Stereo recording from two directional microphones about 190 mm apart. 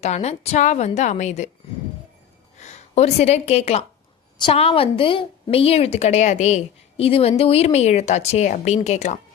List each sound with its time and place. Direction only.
0.0 s a woman's voice: 35° left (ahead or behind)
2.6 s a woman's voice: 35° left (ahead or behind)